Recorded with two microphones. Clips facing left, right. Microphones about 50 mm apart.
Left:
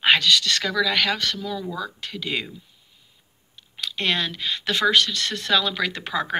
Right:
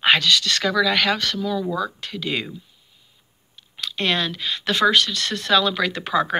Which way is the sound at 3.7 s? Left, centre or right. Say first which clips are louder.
Right 2 dB; centre.